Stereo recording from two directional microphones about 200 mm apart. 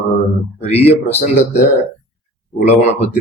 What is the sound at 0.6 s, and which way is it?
Speech, 30° left (ahead or behind).